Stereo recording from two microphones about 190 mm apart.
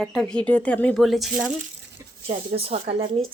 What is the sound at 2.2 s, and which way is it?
Speech, 35° right (ahead or behind).